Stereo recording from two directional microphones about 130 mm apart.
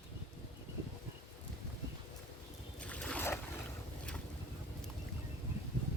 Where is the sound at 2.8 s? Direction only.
10° left (ahead or behind).